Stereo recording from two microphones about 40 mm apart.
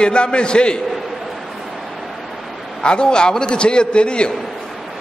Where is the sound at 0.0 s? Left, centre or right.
Left.